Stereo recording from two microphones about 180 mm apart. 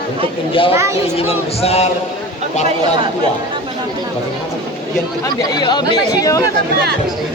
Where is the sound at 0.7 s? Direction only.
15° right (ahead or behind).